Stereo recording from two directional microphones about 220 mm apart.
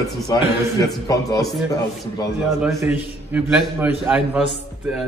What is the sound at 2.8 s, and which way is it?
A man's voice, 10° right (ahead or behind).